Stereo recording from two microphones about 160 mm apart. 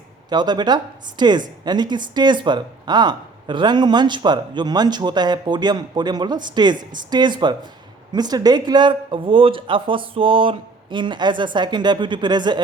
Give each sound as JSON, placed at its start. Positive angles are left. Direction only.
{"t": 0.3, "sound": "a woman's voice", "side_deg": -25}